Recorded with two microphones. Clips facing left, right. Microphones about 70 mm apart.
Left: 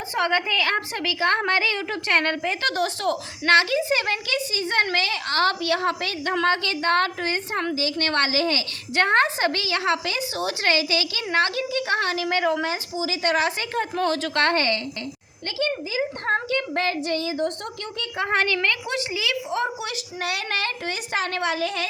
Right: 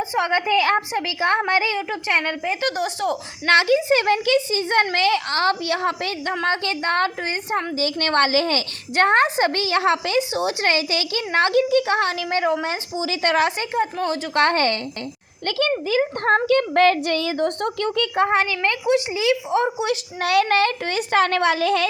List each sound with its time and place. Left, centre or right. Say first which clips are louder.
0.1 s a woman's voice: right 1 dB; centre
3.4 s a woman's voice: right 2 dB; right
7.8 s a woman's voice: right 6 dB; right
13.7 s a woman's voice: even; centre
14.3 s a woman's voice: right 5 dB; right
15.4 s speech: right 5 dB; right
16.3 s a child's voice: right 7 dB; right
18.3 s a woman's voice: right 2 dB; centre
20.2 s a woman's voice: right 10 dB; right